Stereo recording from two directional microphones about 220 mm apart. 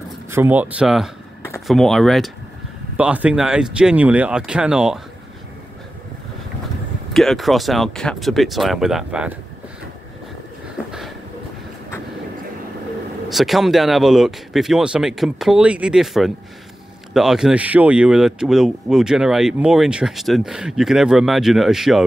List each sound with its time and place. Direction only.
0.3 s speech: 10° right (ahead or behind)
7.2 s speech: centre (ahead or behind)
10.9 s a sound: centre (ahead or behind)
13.3 s speech: centre (ahead or behind)